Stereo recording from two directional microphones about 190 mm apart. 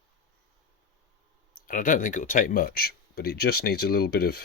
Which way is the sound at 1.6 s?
45° left (ahead or behind).